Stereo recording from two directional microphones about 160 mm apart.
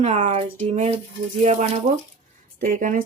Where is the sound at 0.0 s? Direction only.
40° right (ahead or behind).